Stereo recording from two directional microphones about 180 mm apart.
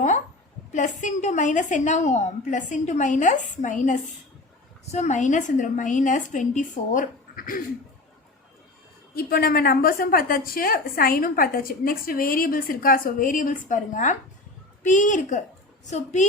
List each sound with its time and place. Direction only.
0.7 s a woman's voice: 45° left (ahead or behind)
9.1 s a woman's voice: 55° left (ahead or behind)